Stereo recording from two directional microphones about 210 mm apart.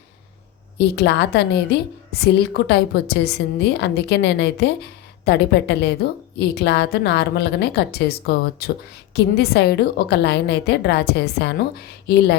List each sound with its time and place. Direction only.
0.8 s a woman's voice: 55° left (ahead or behind)